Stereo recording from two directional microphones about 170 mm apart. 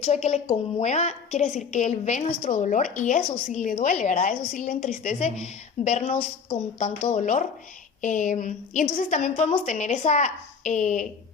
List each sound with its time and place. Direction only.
0.0 s a woman's voice: 40° left (ahead or behind)